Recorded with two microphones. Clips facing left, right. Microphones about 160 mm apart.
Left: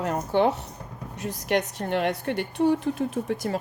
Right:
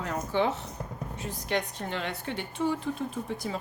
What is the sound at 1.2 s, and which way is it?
Speech, 75° left (ahead or behind).